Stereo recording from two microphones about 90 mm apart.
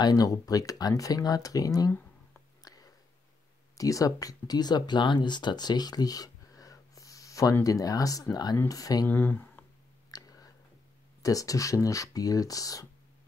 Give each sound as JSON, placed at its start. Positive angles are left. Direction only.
{"t": 0.0, "sound": "speech", "side_deg": 45}
{"t": 2.6, "sound": "a sound", "side_deg": 45}
{"t": 3.7, "sound": "speech", "side_deg": 40}
{"t": 9.0, "sound": "speech", "side_deg": 20}
{"t": 10.1, "sound": "whispering", "side_deg": 45}
{"t": 11.2, "sound": "speech", "side_deg": 40}